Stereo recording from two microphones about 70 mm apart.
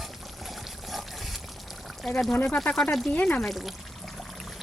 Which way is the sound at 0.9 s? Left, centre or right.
Centre.